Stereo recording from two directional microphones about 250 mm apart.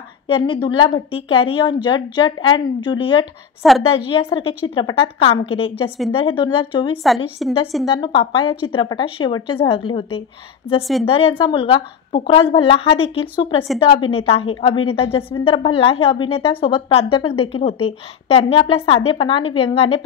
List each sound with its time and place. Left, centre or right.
0.3 s a woman's voice: centre
3.6 s a woman's voice: centre
4.1 s a woman's voice: left
7.2 s a woman's voice: centre
7.9 s a woman's voice: centre
10.8 s a woman's voice: centre
11.1 s a woman's voice: left